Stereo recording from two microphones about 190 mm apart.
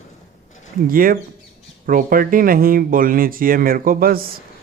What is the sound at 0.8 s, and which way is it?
A man's voice, 50° right (ahead or behind).